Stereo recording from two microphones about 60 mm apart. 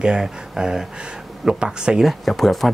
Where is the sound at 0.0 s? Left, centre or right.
Centre.